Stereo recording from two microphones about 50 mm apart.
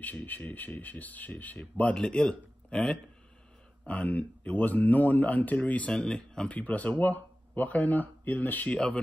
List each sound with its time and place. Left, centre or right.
0.0 s speech: left
2.0 s a man's voice: centre
3.8 s speech: left
5.9 s speech: centre
6.5 s speech: left
8.7 s speech: left